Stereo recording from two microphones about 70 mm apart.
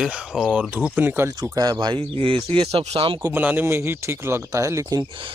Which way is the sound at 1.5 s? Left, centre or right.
Right.